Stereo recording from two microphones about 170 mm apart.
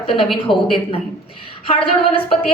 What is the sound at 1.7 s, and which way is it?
Speech, 35° left (ahead or behind).